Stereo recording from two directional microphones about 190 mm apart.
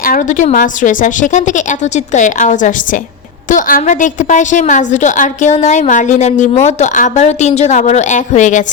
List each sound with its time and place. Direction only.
0.0 s a woman's voice: 45° left (ahead or behind)